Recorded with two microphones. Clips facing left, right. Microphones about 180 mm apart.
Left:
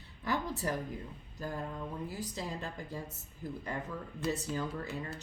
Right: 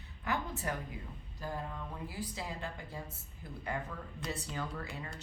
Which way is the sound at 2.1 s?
40° left (ahead or behind).